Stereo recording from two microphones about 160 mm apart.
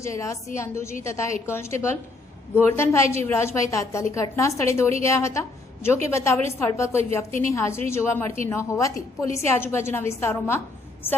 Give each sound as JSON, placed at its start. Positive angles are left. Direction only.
{"t": 0.0, "sound": "a woman's voice", "side_deg": 20}